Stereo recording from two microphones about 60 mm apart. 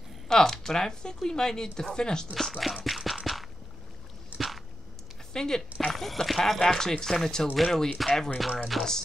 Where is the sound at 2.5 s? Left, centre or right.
Centre.